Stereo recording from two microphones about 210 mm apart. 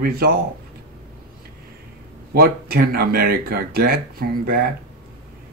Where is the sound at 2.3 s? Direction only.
45° right (ahead or behind).